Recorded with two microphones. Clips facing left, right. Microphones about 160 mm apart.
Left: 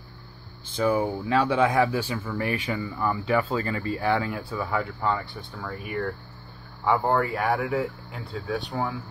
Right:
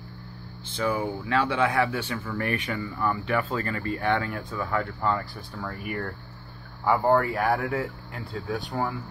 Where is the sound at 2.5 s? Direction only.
30° left (ahead or behind).